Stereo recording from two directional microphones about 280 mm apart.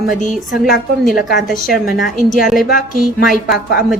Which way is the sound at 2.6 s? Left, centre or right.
Left.